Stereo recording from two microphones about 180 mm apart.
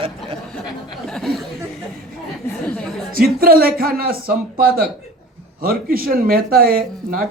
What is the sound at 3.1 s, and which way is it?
Speech, 55° right (ahead or behind).